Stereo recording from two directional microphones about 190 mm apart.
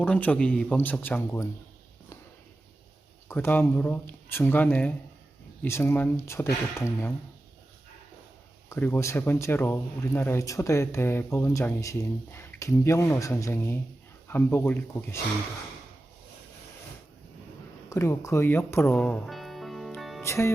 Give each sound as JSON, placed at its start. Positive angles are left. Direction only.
{"t": 0.0, "sound": "speech", "side_deg": 5}
{"t": 3.2, "sound": "speech", "side_deg": 10}
{"t": 8.7, "sound": "speech", "side_deg": 15}
{"t": 17.8, "sound": "speech", "side_deg": 15}
{"t": 18.9, "sound": "music", "side_deg": 0}
{"t": 20.2, "sound": "speech", "side_deg": 15}